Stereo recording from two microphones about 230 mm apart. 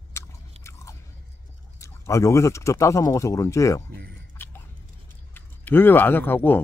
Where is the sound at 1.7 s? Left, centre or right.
Centre.